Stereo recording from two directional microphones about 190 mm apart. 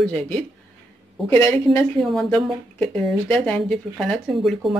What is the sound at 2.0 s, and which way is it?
Speech, centre (ahead or behind).